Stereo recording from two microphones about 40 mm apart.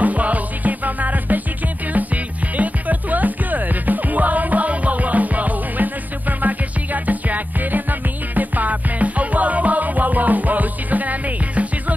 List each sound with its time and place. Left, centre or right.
0.0 s music: right
2.5 s music: right